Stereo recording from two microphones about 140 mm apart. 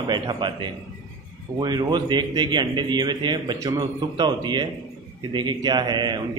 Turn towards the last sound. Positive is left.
turn(degrees=-30)  # may be behind; listen again after turning